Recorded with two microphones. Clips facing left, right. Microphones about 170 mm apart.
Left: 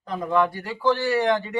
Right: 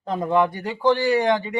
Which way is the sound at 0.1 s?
25° right (ahead or behind).